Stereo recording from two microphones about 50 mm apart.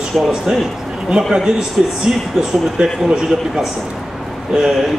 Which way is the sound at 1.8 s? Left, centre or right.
Centre.